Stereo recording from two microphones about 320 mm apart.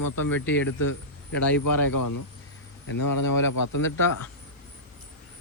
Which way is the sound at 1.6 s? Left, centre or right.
Left.